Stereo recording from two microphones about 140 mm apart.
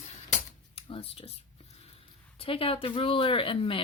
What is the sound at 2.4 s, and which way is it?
A woman's voice, 40° left (ahead or behind).